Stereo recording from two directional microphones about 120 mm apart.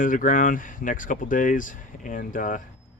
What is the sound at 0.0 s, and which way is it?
Speech, 90° left.